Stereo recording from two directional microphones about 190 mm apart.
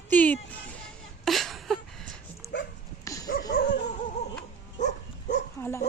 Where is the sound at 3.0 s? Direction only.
15° left (ahead or behind).